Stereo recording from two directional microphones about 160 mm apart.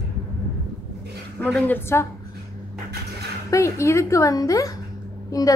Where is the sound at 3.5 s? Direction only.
15° left (ahead or behind).